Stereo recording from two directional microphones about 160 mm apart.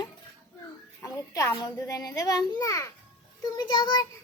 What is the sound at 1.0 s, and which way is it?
A child's voice, 20° left (ahead or behind).